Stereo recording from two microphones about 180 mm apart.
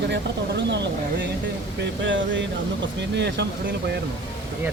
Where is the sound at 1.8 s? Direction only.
90° right.